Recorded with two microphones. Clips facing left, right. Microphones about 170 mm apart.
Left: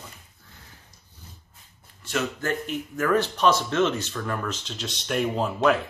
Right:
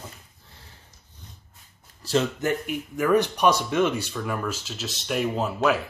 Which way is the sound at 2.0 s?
30° right (ahead or behind).